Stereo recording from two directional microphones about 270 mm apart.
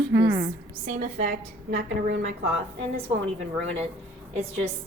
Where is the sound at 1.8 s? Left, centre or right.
Right.